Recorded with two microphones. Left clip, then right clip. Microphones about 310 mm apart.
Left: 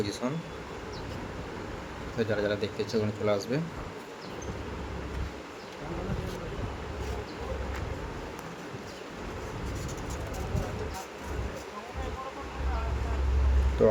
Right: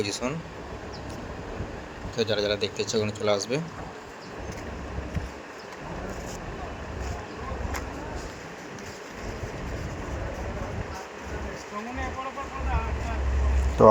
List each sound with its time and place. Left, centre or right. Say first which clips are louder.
0.0 s speech: right 3 dB; right
2.1 s speech: right 4 dB; right
13.8 s speech: right 8 dB; centre